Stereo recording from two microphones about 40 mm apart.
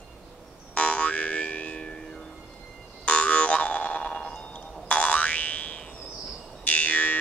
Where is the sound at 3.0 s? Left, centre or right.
Left.